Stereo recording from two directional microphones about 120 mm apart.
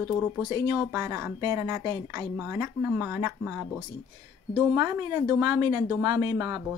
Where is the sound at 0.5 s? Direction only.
30° right (ahead or behind).